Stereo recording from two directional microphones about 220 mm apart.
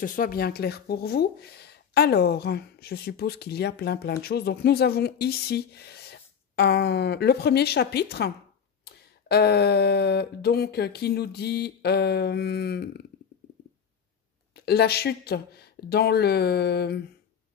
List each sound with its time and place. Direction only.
0.0 s speech: 40° left (ahead or behind)
14.5 s speech: 45° left (ahead or behind)